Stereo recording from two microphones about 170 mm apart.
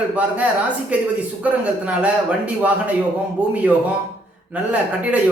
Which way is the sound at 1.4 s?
10° right (ahead or behind).